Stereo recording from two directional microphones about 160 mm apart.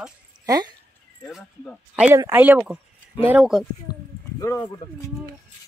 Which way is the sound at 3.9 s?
25° left (ahead or behind).